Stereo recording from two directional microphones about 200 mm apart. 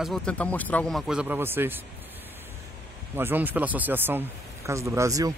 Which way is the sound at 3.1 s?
10° right (ahead or behind).